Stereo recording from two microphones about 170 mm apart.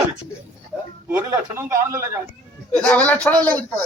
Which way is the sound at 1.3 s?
20° right (ahead or behind).